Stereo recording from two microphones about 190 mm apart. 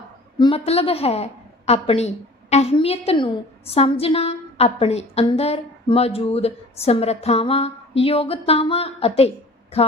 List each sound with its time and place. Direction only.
0.3 s a woman's voice: 25° left (ahead or behind)